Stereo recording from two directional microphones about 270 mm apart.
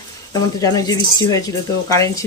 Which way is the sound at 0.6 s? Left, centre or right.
Centre.